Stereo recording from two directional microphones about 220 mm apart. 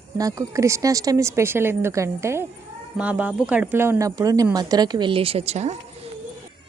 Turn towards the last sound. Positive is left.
turn(degrees=-30)  # may be behind; listen again after turning